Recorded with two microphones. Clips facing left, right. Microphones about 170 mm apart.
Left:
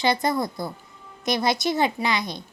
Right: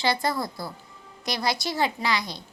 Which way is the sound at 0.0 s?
20° left (ahead or behind).